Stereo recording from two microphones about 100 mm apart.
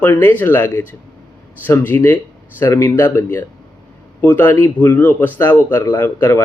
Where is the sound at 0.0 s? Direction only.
20° left (ahead or behind).